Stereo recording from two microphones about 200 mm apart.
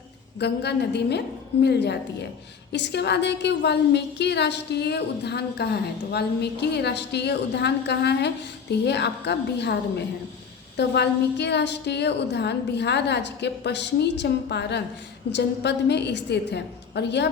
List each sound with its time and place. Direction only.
0.3 s a woman's voice: 55° left (ahead or behind)
10.8 s a woman's voice: 60° left (ahead or behind)